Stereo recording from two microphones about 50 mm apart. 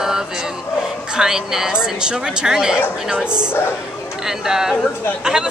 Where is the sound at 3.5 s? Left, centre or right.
Left.